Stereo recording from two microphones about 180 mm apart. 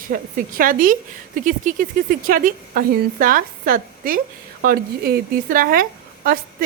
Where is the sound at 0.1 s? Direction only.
50° right (ahead or behind).